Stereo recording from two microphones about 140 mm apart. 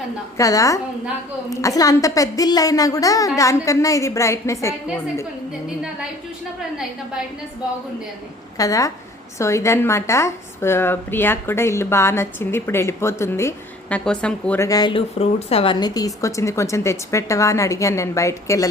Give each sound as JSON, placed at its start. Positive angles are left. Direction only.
{"t": 0.3, "sound": "a woman's voice", "side_deg": 25}
{"t": 5.6, "sound": "a woman's voice", "side_deg": -5}
{"t": 8.5, "sound": "a woman's voice", "side_deg": 25}
{"t": 13.9, "sound": "a woman's voice", "side_deg": 5}
{"t": 14.6, "sound": "a woman's voice", "side_deg": 25}
{"t": 15.2, "sound": "a woman's voice", "side_deg": 45}